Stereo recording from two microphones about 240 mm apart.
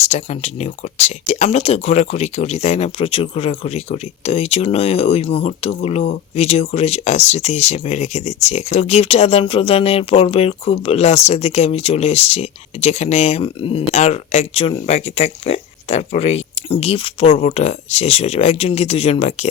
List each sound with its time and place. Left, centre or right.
0.0 s speech: left